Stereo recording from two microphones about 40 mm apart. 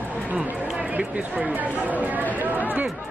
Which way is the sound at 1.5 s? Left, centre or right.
Right.